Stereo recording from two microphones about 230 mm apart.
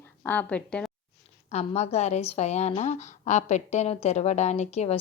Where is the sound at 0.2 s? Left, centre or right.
Centre.